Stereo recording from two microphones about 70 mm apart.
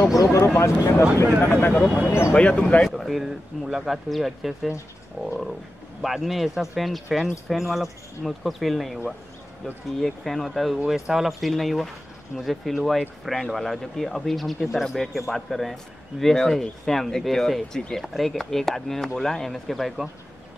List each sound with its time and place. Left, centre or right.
0.2 s speech: left
2.3 s speech: centre
2.8 s speech: centre
5.2 s frog: centre
6.0 s speech: centre